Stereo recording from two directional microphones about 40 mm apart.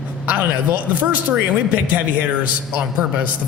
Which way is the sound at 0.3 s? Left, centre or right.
Right.